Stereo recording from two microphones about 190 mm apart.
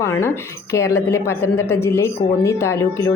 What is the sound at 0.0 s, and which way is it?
Speech, 15° left (ahead or behind).